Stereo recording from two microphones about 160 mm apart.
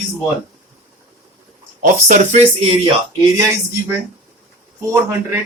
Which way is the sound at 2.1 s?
45° right (ahead or behind).